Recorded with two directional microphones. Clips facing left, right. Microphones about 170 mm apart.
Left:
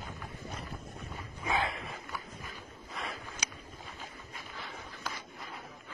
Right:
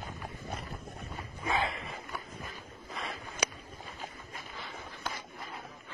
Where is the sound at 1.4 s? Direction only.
Centre (ahead or behind).